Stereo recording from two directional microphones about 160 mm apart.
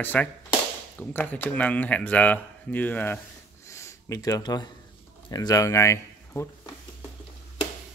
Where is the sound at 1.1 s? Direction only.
10° left (ahead or behind).